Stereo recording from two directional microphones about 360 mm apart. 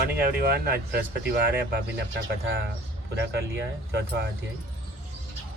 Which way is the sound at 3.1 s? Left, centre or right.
Right.